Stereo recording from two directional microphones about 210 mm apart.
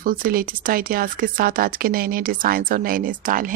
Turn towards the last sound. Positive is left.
turn(degrees=-40)  # may be behind; listen again after turning